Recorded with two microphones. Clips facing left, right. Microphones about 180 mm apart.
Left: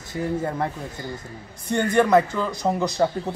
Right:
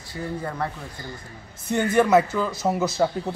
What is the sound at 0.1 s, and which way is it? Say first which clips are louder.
Speech: left 5 dB; 20° left (ahead or behind).